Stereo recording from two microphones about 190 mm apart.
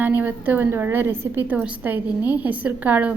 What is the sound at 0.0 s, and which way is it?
A woman's voice, 10° right (ahead or behind).